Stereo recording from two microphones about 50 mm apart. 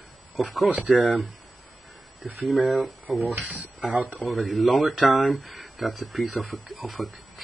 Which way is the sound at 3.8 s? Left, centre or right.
Centre.